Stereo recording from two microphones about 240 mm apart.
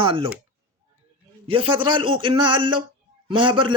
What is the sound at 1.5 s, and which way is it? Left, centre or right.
A man's voice, right.